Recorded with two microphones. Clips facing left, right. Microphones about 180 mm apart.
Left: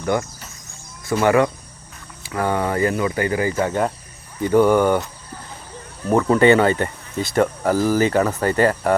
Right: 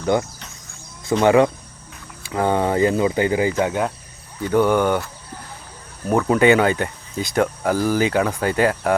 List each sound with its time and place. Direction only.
0.0 s speech: 20° right (ahead or behind)
3.6 s speech: 5° right (ahead or behind)
4.4 s cricket: 10° left (ahead or behind)
6.1 s speech: 5° right (ahead or behind)